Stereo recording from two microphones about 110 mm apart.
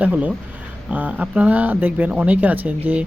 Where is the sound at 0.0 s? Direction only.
15° right (ahead or behind).